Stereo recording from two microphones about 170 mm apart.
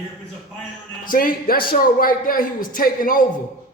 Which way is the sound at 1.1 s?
55° left (ahead or behind).